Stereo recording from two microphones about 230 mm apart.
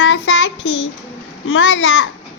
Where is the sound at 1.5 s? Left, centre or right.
Left.